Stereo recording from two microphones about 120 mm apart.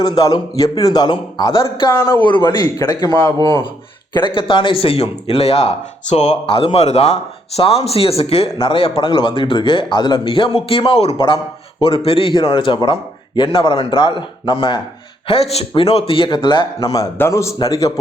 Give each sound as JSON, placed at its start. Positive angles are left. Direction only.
{"t": 0.2, "sound": "a man's voice", "side_deg": 30}
{"t": 4.1, "sound": "a man's voice", "side_deg": 45}
{"t": 15.3, "sound": "a man's voice", "side_deg": 60}
{"t": 16.9, "sound": "a man's voice", "side_deg": 25}